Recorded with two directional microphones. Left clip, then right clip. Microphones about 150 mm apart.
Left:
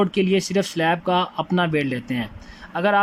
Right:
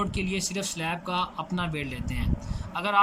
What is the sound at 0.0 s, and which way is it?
Speech, 55° left (ahead or behind).